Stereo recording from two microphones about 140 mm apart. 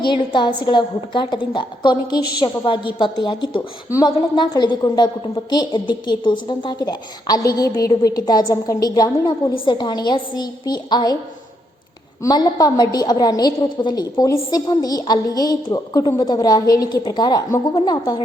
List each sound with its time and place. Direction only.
0.0 s a woman's voice: 35° left (ahead or behind)
12.2 s a woman's voice: 30° left (ahead or behind)